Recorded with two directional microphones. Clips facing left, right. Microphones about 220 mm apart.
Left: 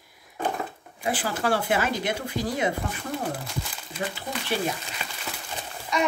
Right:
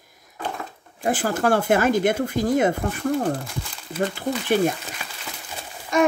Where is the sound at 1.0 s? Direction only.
45° right (ahead or behind).